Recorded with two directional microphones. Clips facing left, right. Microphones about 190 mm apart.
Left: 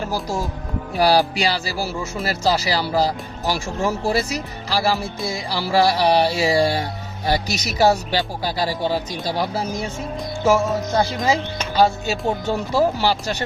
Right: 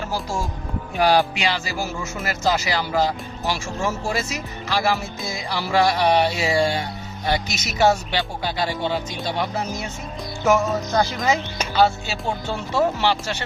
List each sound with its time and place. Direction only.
0.1 s speech: 40° left (ahead or behind)
11.7 s speech: 40° left (ahead or behind)